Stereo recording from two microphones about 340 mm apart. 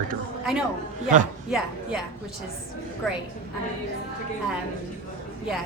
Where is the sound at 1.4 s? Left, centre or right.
Centre.